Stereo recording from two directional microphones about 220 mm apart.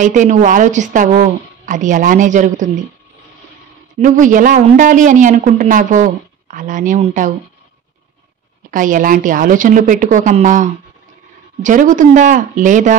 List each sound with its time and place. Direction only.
0.0 s speech: 35° right (ahead or behind)
4.0 s speech: 35° right (ahead or behind)
8.6 s speech: 35° right (ahead or behind)